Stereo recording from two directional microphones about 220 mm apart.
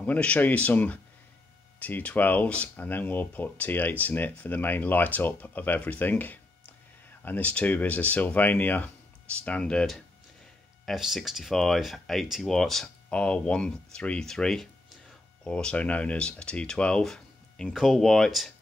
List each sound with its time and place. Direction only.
0.0 s speech: 5° left (ahead or behind)